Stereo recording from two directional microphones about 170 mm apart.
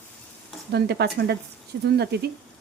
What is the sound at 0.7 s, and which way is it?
Speech, 75° right (ahead or behind).